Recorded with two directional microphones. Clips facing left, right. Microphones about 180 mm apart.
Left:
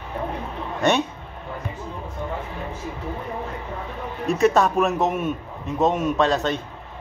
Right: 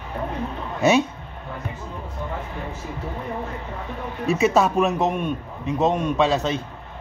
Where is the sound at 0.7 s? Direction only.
Centre (ahead or behind).